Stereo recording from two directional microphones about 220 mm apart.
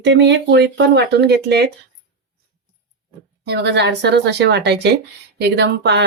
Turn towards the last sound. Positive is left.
turn(degrees=-50)  # may be behind; listen again after turning